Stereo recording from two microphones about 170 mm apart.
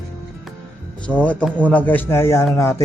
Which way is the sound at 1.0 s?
10° left (ahead or behind).